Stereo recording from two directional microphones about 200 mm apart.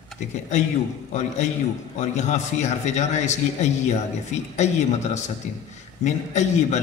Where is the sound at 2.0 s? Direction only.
35° left (ahead or behind).